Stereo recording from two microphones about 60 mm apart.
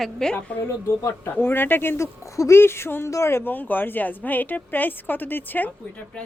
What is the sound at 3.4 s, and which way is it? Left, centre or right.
Speech, left.